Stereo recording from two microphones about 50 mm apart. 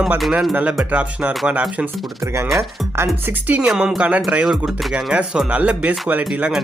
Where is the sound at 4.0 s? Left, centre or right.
Right.